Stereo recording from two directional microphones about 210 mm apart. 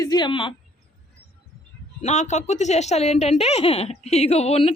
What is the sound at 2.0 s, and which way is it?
A woman's voice, 35° left (ahead or behind).